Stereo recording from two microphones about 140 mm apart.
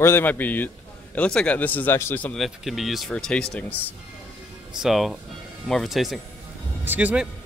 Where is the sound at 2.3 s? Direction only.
Centre (ahead or behind).